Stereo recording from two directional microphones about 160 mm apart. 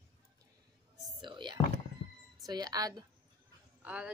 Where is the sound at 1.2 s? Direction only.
30° right (ahead or behind).